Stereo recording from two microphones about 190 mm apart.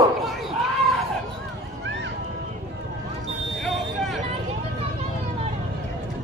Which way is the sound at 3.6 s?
Centre (ahead or behind).